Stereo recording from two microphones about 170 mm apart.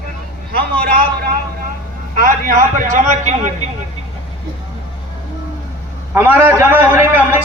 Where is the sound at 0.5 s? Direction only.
65° right (ahead or behind); by 3.5 s 45° right (ahead or behind).